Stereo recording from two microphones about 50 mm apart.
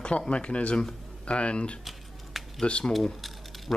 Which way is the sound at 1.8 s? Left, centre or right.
Centre.